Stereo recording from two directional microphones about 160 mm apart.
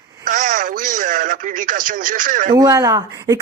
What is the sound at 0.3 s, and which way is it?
Radio, 55° right (ahead or behind).